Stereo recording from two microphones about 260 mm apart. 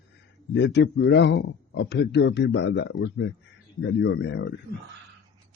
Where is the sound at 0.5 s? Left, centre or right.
Left.